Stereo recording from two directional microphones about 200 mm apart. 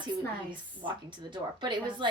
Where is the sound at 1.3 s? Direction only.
25° right (ahead or behind).